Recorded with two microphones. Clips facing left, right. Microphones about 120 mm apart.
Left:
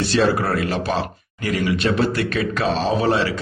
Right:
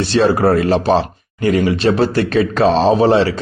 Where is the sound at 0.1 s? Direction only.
30° right (ahead or behind).